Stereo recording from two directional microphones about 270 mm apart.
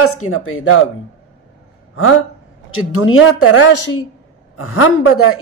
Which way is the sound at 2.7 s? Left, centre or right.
Left.